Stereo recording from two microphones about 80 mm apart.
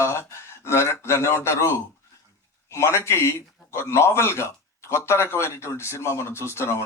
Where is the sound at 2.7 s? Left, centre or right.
Left.